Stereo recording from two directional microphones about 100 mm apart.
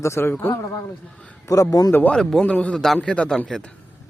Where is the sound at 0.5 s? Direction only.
30° left (ahead or behind).